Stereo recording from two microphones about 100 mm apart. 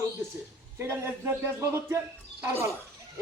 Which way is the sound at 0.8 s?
25° right (ahead or behind).